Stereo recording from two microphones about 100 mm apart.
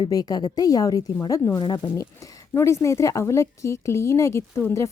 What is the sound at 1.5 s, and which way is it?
Speech, 45° left (ahead or behind).